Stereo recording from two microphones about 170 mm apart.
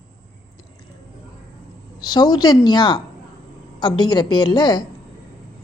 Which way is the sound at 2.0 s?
25° left (ahead or behind).